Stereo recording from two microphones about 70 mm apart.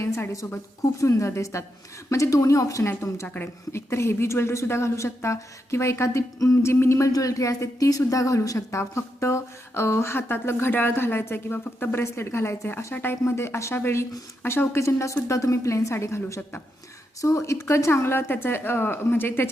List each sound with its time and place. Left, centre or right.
0.0 s speech: left
0.8 s a woman's voice: left
3.2 s speech: left
3.7 s speech: left
7.1 s a woman's voice: left
17.2 s speech: left